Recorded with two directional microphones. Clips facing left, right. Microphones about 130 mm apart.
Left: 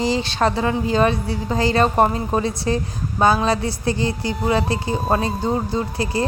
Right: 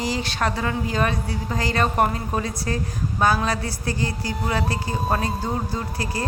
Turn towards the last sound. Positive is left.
turn(degrees=25)  # may be behind; listen again after turning